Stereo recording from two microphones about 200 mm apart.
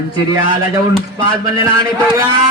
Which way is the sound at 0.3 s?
20° right (ahead or behind).